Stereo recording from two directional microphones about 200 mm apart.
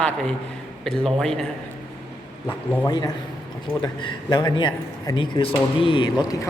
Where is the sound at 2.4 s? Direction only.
10° left (ahead or behind).